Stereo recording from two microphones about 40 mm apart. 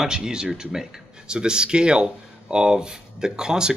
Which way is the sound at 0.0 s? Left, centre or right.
Centre.